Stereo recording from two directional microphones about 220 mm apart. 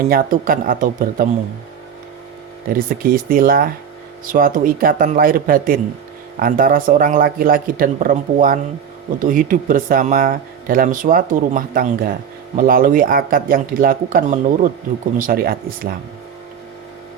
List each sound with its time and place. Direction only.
0.0 s speech: 40° right (ahead or behind)
2.6 s speech: 40° right (ahead or behind)